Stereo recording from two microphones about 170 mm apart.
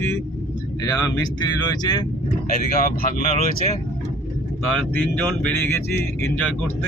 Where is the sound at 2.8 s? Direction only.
50° left (ahead or behind).